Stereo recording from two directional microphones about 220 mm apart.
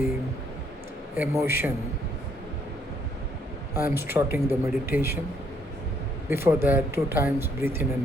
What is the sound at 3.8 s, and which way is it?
Speech, 10° right (ahead or behind).